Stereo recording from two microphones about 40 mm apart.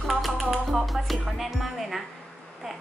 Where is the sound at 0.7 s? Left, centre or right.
Centre.